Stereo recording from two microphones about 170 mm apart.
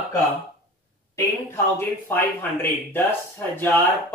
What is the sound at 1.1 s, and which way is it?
Speech, 15° left (ahead or behind).